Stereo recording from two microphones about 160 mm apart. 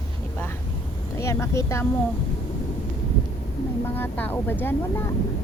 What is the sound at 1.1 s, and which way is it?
Speech, 15° left (ahead or behind).